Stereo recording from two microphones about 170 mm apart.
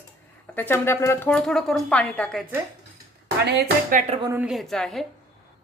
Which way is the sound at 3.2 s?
75° right (ahead or behind).